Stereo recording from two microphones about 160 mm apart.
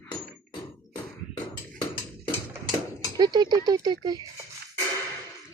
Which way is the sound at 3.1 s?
25° right (ahead or behind).